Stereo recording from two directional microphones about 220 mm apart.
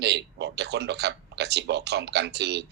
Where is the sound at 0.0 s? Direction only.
50° right (ahead or behind).